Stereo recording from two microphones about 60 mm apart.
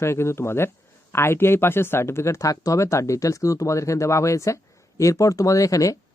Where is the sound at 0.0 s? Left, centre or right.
Left.